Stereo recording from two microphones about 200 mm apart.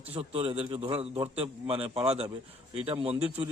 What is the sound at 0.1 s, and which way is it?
A man's voice, 30° right (ahead or behind).